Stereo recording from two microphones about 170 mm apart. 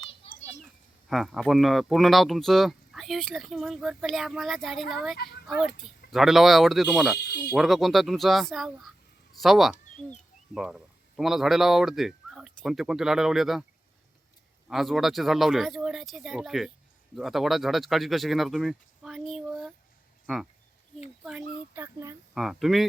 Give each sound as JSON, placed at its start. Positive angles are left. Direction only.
{"t": 0.2, "sound": "children playing", "side_deg": 35}
{"t": 0.6, "sound": "speech", "side_deg": 0}
{"t": 5.1, "sound": "speech", "side_deg": 65}
{"t": 5.5, "sound": "speech", "side_deg": 0}
{"t": 14.7, "sound": "speech", "side_deg": 0}
{"t": 21.7, "sound": "speech", "side_deg": -15}
{"t": 22.4, "sound": "speech", "side_deg": 0}